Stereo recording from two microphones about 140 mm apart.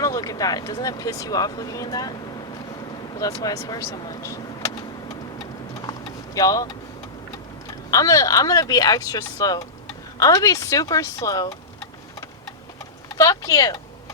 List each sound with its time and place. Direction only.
0.0 s speech: 25° left (ahead or behind)
3.2 s vehicle: 25° left (ahead or behind)
7.9 s speech: 25° left (ahead or behind)
13.1 s speech: 25° left (ahead or behind)